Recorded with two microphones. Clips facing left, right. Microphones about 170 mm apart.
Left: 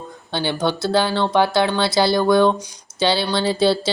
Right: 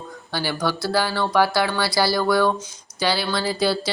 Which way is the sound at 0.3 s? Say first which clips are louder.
Left 3 dB; 25° left (ahead or behind).